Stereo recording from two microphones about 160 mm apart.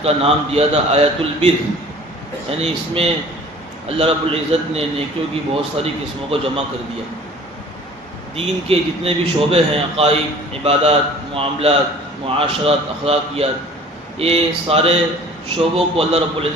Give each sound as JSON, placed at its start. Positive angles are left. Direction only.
{"t": 0.0, "sound": "a man's voice", "side_deg": -40}
{"t": 2.5, "sound": "a man's voice", "side_deg": -40}
{"t": 8.4, "sound": "a man's voice", "side_deg": -40}